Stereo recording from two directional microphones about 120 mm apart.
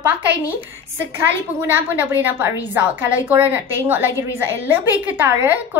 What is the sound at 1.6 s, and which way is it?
A woman's voice, 15° right (ahead or behind).